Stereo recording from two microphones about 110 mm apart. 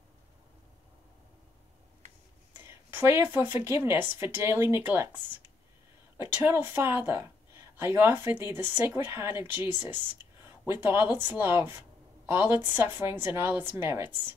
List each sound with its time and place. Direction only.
2.6 s a woman's voice: 25° right (ahead or behind)
6.1 s a woman's voice: 25° right (ahead or behind)